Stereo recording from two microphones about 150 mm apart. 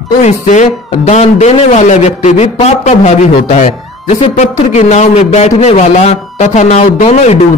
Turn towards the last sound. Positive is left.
turn(degrees=45)  # may be behind; listen again after turning